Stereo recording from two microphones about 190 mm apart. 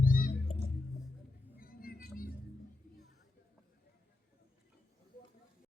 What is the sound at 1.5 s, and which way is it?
Music, 50° left (ahead or behind).